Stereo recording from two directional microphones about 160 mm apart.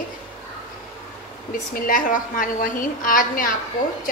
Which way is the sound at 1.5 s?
65° left (ahead or behind).